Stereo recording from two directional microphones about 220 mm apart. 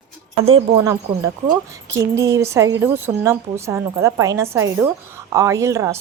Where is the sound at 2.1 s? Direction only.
15° right (ahead or behind).